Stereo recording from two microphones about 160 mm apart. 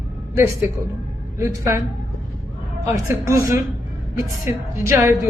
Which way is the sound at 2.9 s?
15° right (ahead or behind).